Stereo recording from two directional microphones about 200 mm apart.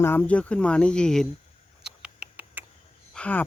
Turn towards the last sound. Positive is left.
turn(degrees=5)  # may be behind; listen again after turning